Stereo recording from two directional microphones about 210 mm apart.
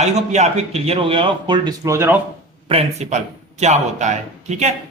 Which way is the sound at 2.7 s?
30° right (ahead or behind).